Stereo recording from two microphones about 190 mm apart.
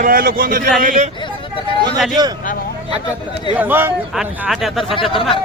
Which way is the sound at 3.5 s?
10° right (ahead or behind).